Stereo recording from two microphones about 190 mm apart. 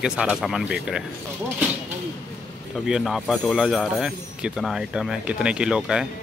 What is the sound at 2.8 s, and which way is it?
A man's voice, centre (ahead or behind).